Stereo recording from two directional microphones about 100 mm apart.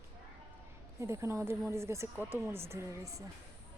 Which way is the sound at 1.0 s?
30° right (ahead or behind).